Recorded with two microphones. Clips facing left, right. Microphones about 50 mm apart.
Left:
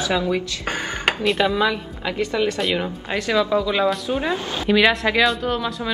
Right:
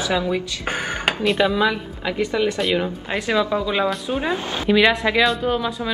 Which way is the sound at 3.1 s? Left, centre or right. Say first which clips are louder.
Left 1 dB; centre.